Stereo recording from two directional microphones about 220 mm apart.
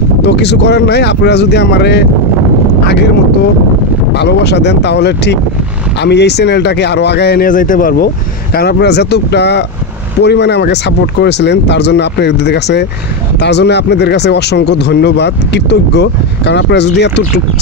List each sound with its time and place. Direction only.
0.2 s speech: 50° left (ahead or behind)
4.1 s speech: 50° left (ahead or behind)